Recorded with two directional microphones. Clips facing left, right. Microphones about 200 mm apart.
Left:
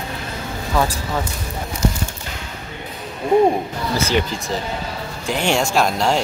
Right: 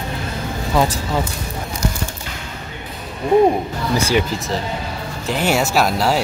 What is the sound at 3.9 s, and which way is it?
Speech, 15° right (ahead or behind).